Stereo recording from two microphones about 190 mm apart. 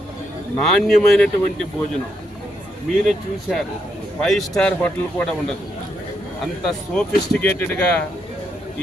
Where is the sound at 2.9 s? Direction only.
Centre (ahead or behind).